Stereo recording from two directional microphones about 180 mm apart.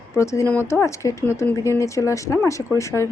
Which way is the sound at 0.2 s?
15° left (ahead or behind).